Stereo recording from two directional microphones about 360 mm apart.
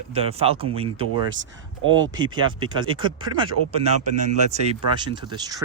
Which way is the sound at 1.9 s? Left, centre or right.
Centre.